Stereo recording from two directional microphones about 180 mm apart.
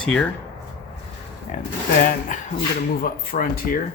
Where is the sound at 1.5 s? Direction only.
45° left (ahead or behind).